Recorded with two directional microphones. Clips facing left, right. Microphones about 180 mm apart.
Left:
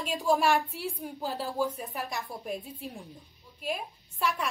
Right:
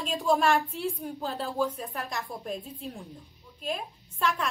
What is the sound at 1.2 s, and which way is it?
Speech, 15° left (ahead or behind).